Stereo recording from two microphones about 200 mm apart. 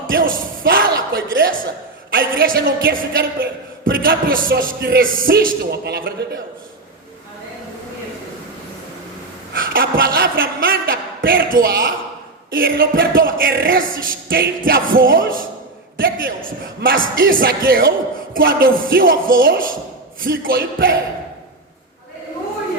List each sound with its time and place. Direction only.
0.1 s a man's voice: 45° right (ahead or behind)
9.5 s a man's voice: 50° right (ahead or behind)